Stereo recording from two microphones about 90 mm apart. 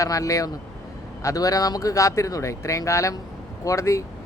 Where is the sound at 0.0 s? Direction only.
40° left (ahead or behind).